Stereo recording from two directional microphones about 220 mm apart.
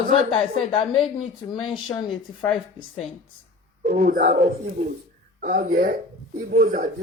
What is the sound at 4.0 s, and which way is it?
Speech, 40° right (ahead or behind).